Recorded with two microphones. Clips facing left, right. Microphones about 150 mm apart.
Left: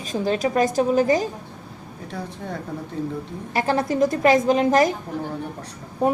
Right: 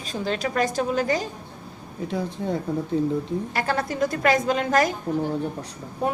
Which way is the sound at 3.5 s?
20° left (ahead or behind).